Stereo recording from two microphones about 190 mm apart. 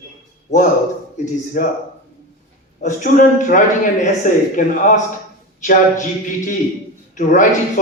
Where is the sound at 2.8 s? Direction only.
40° left (ahead or behind).